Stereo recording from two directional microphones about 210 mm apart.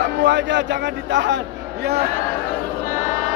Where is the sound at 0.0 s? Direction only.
55° right (ahead or behind).